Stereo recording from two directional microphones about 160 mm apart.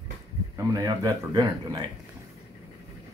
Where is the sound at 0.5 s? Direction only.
25° right (ahead or behind).